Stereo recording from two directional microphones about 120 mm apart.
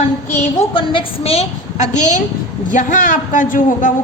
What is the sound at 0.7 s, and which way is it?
A woman's voice, 45° left (ahead or behind).